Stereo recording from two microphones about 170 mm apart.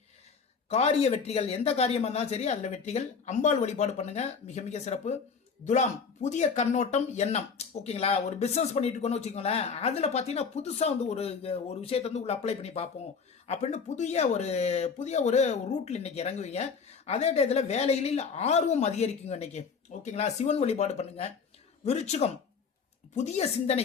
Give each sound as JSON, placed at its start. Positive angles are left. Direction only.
{"t": 0.7, "sound": "speech", "side_deg": 40}